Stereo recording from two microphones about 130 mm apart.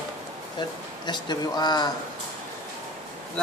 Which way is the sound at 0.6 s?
35° left (ahead or behind).